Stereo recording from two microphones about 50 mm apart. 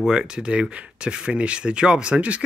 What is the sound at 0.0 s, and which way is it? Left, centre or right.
Speech, centre.